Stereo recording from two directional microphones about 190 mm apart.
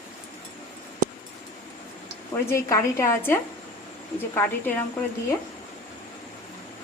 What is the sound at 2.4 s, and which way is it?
A woman's voice, 15° left (ahead or behind).